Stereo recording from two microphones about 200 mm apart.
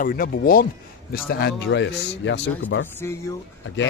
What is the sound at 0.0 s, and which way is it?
Speech, 45° left (ahead or behind).